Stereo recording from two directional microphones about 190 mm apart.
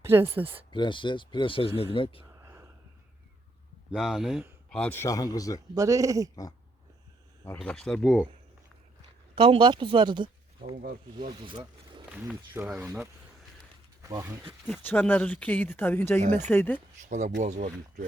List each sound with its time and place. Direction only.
0.0 s speech: 10° right (ahead or behind)
0.7 s speech: 25° left (ahead or behind)
2.4 s a sound: 15° right (ahead or behind)
3.9 s speech: centre (ahead or behind)
4.7 s speech: 10° left (ahead or behind)
5.7 s speech: 15° right (ahead or behind)
7.4 s speech: 10° left (ahead or behind)
9.3 s speech: 25° right (ahead or behind)
10.8 s speech: 50° right (ahead or behind)
11.3 s speech: 25° right (ahead or behind)
12.1 s speech: 5° right (ahead or behind)
14.0 s speech: 15° right (ahead or behind)
14.7 s speech: 10° left (ahead or behind)
17.0 s speech: 40° right (ahead or behind)